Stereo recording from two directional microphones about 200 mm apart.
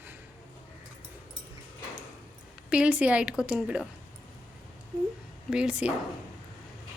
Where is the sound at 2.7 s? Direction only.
5° right (ahead or behind).